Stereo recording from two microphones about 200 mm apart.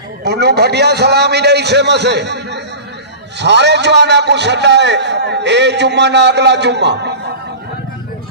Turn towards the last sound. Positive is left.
turn(degrees=-60)  # may be behind; listen again after turning